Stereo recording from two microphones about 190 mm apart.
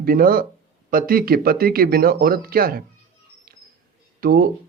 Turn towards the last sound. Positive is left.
turn(degrees=-50)  # may be behind; listen again after turning